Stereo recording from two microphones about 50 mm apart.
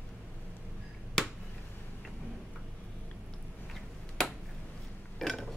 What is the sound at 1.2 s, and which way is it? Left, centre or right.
Finger snapping, centre.